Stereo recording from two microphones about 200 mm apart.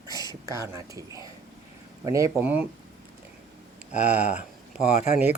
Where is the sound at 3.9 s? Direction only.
35° left (ahead or behind).